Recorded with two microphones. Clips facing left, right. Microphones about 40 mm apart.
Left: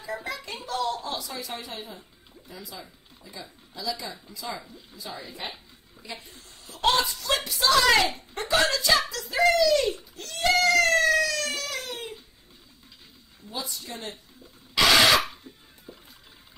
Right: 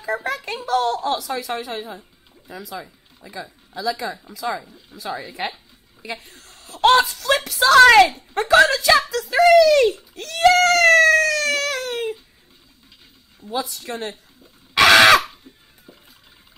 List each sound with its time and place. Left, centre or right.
0.0 s speech: right
13.5 s speech: right
14.7 s a sound: right